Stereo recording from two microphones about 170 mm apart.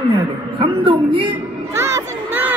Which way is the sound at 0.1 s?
30° right (ahead or behind).